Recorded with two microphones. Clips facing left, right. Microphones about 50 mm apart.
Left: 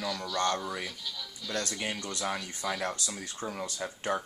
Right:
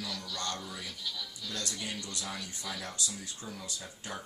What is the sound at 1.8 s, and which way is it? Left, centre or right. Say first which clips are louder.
Speech: left 5 dB; left.